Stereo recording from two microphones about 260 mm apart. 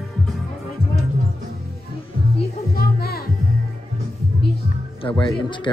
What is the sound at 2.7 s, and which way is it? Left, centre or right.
Music, left.